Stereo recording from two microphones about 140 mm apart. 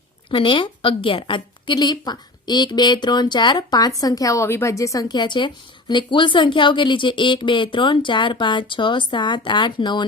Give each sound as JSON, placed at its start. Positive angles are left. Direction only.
{"t": 0.3, "sound": "a woman's voice", "side_deg": 35}